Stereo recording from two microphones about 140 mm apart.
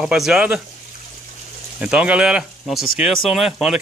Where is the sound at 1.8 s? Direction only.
5° right (ahead or behind).